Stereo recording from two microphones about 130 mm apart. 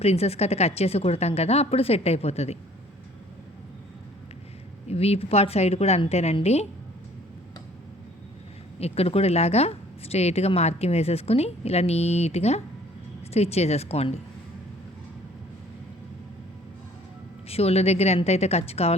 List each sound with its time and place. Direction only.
0.0 s a woman's voice: 50° left (ahead or behind)
4.9 s a woman's voice: 50° left (ahead or behind)
8.8 s a woman's voice: 50° left (ahead or behind)
17.5 s a woman's voice: 50° left (ahead or behind)